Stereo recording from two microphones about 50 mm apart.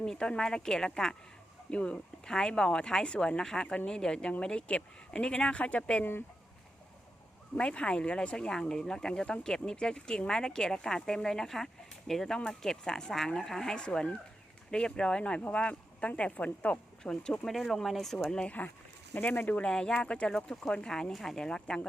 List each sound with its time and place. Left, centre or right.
0.0 s speech: centre
1.7 s speech: left
7.5 s speech: left
13.7 s speech: centre
17.0 s speech: centre
17.4 s speech: centre
19.1 s speech: left
19.5 s speech: left